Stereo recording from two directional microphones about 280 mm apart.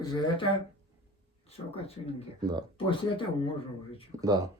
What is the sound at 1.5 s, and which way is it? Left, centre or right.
Speech, left.